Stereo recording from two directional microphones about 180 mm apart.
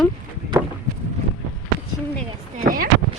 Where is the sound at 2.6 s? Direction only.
50° right (ahead or behind).